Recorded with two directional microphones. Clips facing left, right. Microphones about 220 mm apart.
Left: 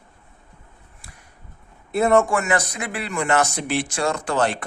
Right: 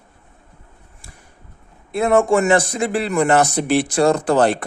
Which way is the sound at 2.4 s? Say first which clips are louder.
Right 7 dB; 30° right (ahead or behind).